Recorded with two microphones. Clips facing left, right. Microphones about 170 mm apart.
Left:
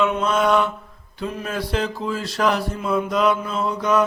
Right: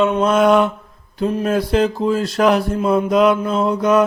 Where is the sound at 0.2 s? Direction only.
50° right (ahead or behind).